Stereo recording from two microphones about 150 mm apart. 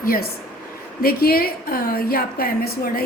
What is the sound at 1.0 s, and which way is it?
A woman's voice, 90° left.